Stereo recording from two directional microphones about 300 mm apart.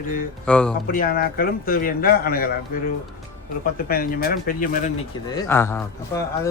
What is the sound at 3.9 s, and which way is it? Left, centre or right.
Speech, left.